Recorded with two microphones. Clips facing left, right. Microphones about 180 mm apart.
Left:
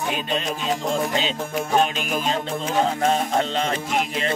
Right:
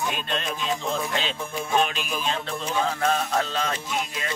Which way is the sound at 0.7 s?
40° left (ahead or behind).